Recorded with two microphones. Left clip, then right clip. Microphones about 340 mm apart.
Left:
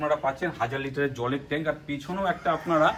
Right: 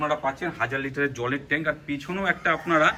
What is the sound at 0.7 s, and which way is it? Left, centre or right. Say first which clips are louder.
Speech: right 2 dB; centre.